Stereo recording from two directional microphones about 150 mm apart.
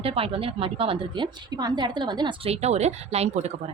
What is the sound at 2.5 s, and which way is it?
Speech, 45° right (ahead or behind).